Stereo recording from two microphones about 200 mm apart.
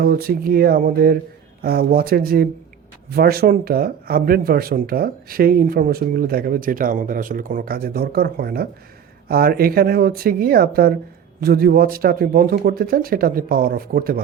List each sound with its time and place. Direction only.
0.0 s speech: 50° right (ahead or behind)